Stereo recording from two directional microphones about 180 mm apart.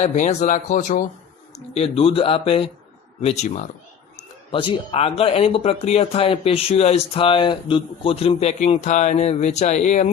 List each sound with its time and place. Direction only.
0.0 s speech: 40° left (ahead or behind)